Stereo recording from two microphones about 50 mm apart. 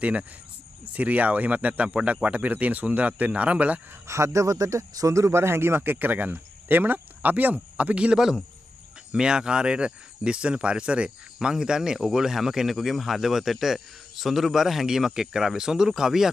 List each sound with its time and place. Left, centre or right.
0.0 s speech: right
4.1 s a man's voice: right; by 16.3 s centre